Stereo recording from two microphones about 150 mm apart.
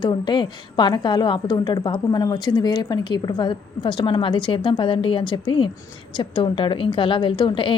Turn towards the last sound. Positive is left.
turn(degrees=35)  # may be behind; listen again after turning